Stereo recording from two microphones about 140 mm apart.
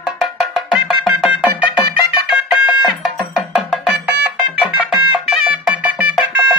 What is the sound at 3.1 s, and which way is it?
Music, 5° right (ahead or behind).